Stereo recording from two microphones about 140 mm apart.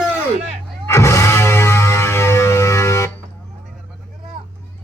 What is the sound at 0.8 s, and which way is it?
Music, 20° left (ahead or behind).